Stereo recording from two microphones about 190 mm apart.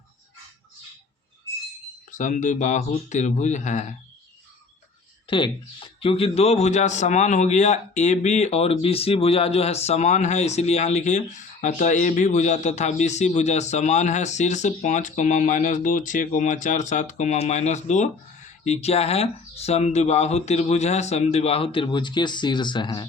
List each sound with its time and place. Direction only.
2.0 s speech: 40° left (ahead or behind)
5.3 s speech: 25° left (ahead or behind)